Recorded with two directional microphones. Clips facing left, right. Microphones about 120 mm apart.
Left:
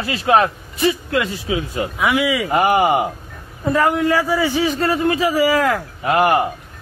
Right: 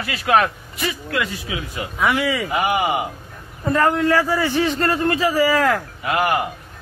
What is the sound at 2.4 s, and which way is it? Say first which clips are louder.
Speech: left 5 dB; 40° left (ahead or behind).